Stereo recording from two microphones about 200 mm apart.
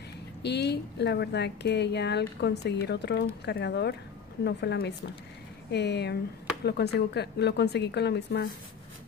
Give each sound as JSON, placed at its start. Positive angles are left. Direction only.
{"t": 0.4, "sound": "a woman's voice", "side_deg": 55}